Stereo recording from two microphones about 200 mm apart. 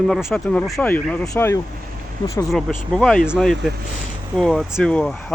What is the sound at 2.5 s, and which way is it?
Speech, centre (ahead or behind).